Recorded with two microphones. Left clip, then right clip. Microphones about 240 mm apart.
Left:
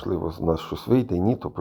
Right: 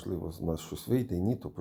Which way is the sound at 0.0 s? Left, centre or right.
Left.